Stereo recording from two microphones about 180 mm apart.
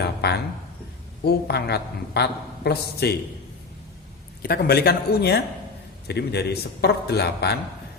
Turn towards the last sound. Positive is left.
turn(degrees=65)  # may be behind; listen again after turning